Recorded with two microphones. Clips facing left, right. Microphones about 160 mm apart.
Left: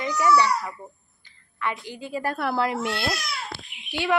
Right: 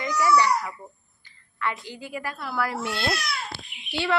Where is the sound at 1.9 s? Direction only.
20° left (ahead or behind).